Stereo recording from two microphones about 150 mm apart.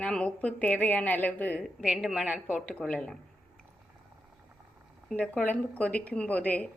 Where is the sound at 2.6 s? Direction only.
5° left (ahead or behind).